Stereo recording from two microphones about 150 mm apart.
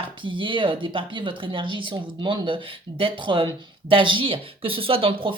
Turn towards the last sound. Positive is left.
turn(degrees=-35)  # may be behind; listen again after turning